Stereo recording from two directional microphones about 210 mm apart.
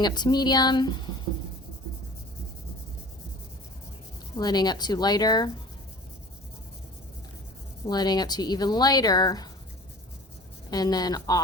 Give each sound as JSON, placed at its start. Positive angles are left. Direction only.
{"t": 0.0, "sound": "speech", "side_deg": 20}
{"t": 4.4, "sound": "speech", "side_deg": 20}
{"t": 7.9, "sound": "speech", "side_deg": 20}
{"t": 10.7, "sound": "speech", "side_deg": 20}